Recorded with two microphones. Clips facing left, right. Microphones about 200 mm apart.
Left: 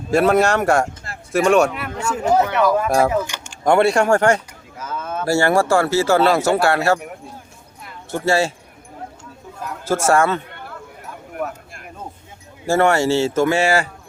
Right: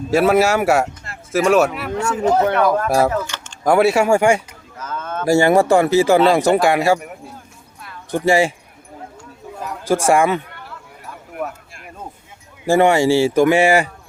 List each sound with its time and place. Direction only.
0.1 s speech: 5° right (ahead or behind); by 3.6 s 10° left (ahead or behind)
3.6 s speech: 5° right (ahead or behind)
4.8 s a sound: 10° left (ahead or behind)
5.2 s speech: 15° right (ahead or behind)
8.1 s speech: 15° right (ahead or behind)
9.8 s speech: 15° right (ahead or behind)
12.6 s speech: 15° right (ahead or behind)